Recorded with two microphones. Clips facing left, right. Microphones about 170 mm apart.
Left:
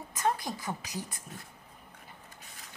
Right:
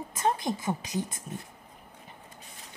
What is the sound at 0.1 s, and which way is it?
A woman's voice, 25° right (ahead or behind).